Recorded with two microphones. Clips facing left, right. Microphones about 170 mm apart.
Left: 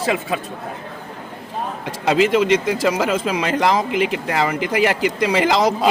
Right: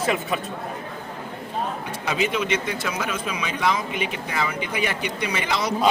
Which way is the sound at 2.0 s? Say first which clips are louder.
Left 9 dB; 85° left.